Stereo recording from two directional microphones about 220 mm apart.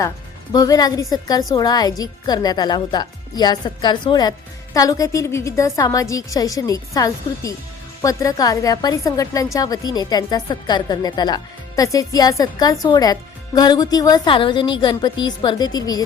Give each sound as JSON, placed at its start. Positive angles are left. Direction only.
{"t": 0.5, "sound": "a woman's voice", "side_deg": 15}